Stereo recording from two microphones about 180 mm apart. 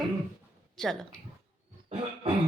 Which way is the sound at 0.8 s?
5° left (ahead or behind).